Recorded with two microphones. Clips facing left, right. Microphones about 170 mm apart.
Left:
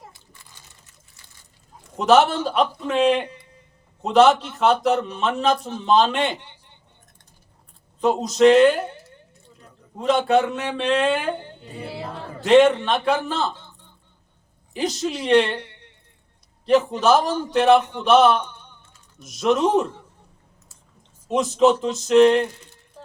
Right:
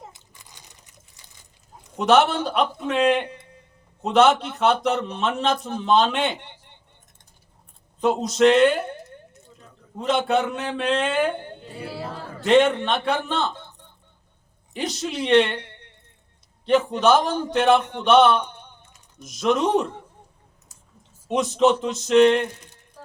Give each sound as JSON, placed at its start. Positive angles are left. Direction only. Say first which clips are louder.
{"t": 0.0, "sound": "a sound", "louder": "right 2 dB", "side_deg": -20}
{"t": 2.0, "sound": "a man's voice", "louder": "left 2 dB", "side_deg": 0}
{"t": 8.0, "sound": "a man's voice", "louder": "left 2 dB", "side_deg": 0}
{"t": 14.7, "sound": "a man's voice", "louder": "left 3 dB", "side_deg": 0}
{"t": 16.6, "sound": "a man's voice", "louder": "left 1 dB", "side_deg": 0}
{"t": 21.2, "sound": "a man's voice", "louder": "left 2 dB", "side_deg": 0}